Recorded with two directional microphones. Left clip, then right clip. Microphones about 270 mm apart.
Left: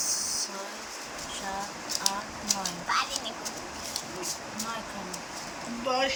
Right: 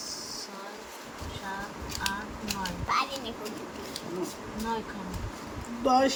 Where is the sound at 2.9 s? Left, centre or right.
Right.